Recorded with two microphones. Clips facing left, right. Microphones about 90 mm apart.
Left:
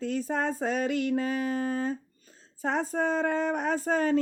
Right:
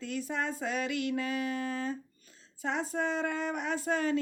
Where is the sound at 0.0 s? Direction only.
40° left (ahead or behind).